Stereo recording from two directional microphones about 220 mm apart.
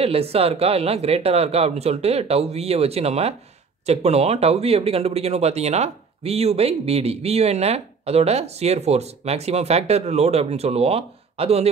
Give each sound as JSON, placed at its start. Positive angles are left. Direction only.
{"t": 0.0, "sound": "speech", "side_deg": -25}